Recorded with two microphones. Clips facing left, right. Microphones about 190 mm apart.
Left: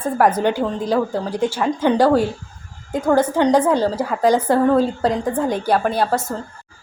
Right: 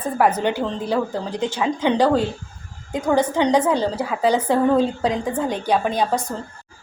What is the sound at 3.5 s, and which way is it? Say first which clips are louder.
A woman's voice: left 2 dB; 10° left (ahead or behind).